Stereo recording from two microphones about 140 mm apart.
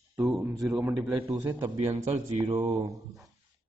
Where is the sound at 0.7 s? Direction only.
15° right (ahead or behind).